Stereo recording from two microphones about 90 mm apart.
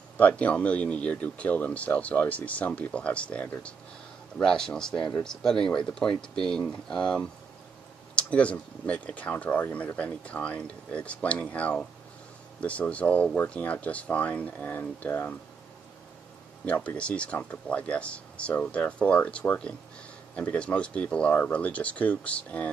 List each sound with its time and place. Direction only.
0.2 s speech: 15° left (ahead or behind)
16.6 s speech: 15° left (ahead or behind)